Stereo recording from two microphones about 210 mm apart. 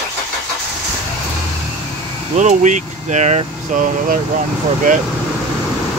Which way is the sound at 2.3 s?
35° right (ahead or behind).